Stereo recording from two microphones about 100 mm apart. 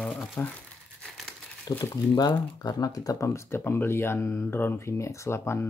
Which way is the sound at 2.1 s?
40° left (ahead or behind).